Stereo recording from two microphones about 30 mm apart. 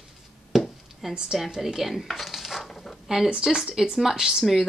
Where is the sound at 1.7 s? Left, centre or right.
Centre.